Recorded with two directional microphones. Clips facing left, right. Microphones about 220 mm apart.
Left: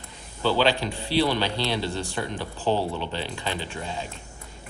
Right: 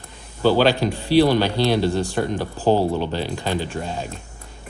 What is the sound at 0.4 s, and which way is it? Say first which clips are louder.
A man's voice: right 6 dB; 45° right (ahead or behind).